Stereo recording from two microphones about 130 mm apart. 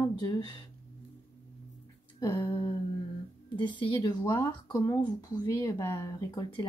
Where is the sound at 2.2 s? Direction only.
35° left (ahead or behind).